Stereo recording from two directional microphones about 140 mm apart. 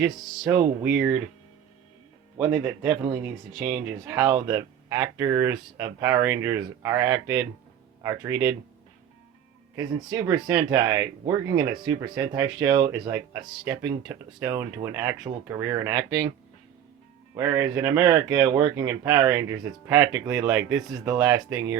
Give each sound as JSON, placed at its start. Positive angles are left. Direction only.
{"t": 0.5, "sound": "speech", "side_deg": -20}
{"t": 2.4, "sound": "speech", "side_deg": -10}
{"t": 10.1, "sound": "speech", "side_deg": -30}
{"t": 17.3, "sound": "speech", "side_deg": -20}